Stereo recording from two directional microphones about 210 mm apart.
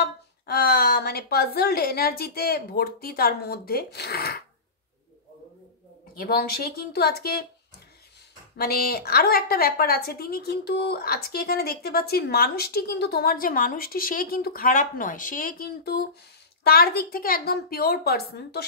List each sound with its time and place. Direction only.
0.0 s speech: 45° left (ahead or behind)
6.1 s a woman's voice: 45° left (ahead or behind)
8.5 s a woman's voice: 45° left (ahead or behind)